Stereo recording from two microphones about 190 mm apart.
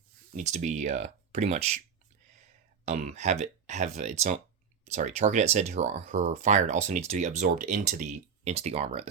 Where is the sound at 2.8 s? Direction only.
35° right (ahead or behind).